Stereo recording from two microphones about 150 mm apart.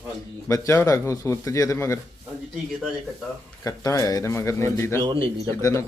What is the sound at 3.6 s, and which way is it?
Speech, 20° left (ahead or behind).